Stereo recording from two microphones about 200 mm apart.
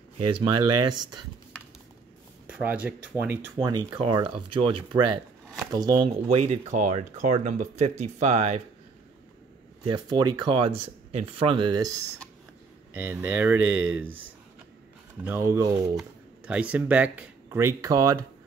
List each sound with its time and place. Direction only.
0.2 s speech: 25° right (ahead or behind)
2.4 s speech: 5° right (ahead or behind)
3.5 s speech: 20° right (ahead or behind)
9.8 s speech: 20° right (ahead or behind)
12.9 s speech: 10° right (ahead or behind)
15.2 s speech: 10° right (ahead or behind)
16.0 s speech: 5° right (ahead or behind)